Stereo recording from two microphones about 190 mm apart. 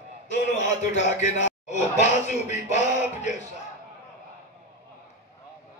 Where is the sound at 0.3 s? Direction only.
40° left (ahead or behind).